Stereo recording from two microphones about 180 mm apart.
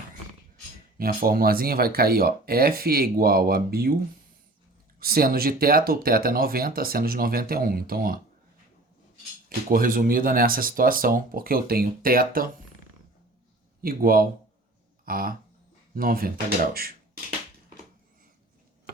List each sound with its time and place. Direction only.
0.9 s speech: 55° right (ahead or behind)
4.9 s speech: 55° right (ahead or behind)
9.6 s speech: 50° right (ahead or behind)
13.8 s speech: 55° right (ahead or behind)